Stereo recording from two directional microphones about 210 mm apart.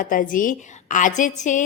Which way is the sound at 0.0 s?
40° left (ahead or behind).